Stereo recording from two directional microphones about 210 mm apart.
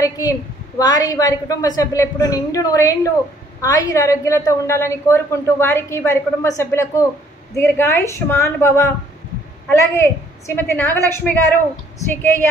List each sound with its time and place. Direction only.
0.0 s a woman's voice: 15° left (ahead or behind)